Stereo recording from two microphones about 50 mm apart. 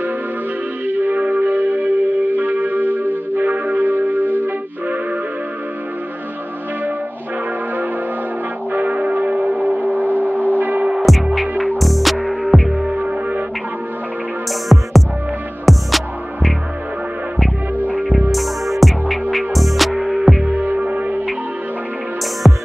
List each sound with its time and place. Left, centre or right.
0.8 s music: right
8.7 s music: right
10.0 s singing bowl: left
10.6 s music: right
11.1 s music: centre
12.9 s music: right
14.7 s music: centre
18.3 s music: centre
20.4 s music: right
22.4 s music: centre